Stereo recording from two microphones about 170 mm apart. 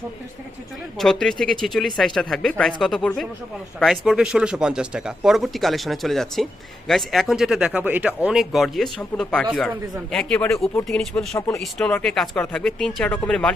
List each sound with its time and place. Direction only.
0.9 s speech: centre (ahead or behind)
11.3 s speech: 15° left (ahead or behind)
11.6 s speech: centre (ahead or behind)